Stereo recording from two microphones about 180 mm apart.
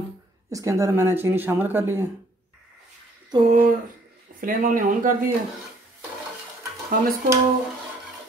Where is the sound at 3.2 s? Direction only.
30° right (ahead or behind).